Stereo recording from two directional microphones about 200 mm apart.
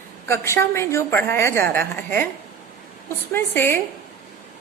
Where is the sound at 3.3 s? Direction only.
10° left (ahead or behind).